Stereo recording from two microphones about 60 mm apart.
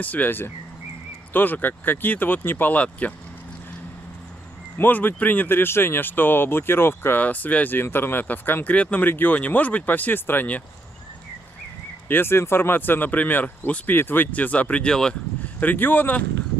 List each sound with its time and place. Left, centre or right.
0.0 s speech: left
4.7 s speech: left
7.2 s speech: left
8.7 s speech: left
9.0 s speech: left
12.1 s speech: left; by 15.1 s centre
15.6 s speech: left